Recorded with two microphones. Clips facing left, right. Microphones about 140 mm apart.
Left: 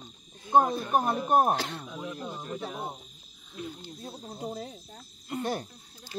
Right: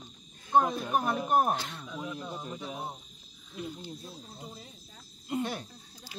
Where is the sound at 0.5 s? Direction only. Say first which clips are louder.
Left 3 dB; 35° left (ahead or behind).